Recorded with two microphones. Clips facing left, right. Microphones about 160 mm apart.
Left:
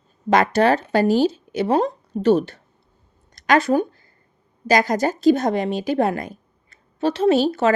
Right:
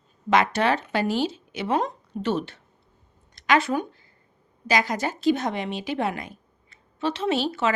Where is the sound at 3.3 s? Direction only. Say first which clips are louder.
Left 5 dB; 40° left (ahead or behind).